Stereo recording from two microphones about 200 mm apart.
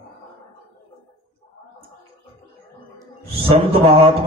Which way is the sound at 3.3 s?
30° right (ahead or behind).